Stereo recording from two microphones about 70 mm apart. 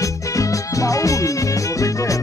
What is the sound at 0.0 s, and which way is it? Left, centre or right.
Music, left.